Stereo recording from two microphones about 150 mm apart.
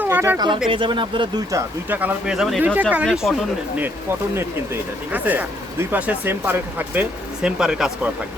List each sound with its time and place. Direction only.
0.0 s a sound: 15° right (ahead or behind)
0.3 s speech: 30° right (ahead or behind)
1.5 s speech: 15° right (ahead or behind)
5.1 s speech: 10° right (ahead or behind)